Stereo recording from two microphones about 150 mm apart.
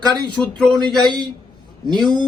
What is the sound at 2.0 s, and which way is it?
Speech, 30° right (ahead or behind).